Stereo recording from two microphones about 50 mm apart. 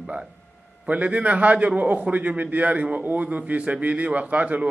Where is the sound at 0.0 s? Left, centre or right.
Centre.